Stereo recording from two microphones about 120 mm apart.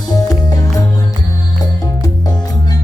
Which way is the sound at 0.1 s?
30° left (ahead or behind).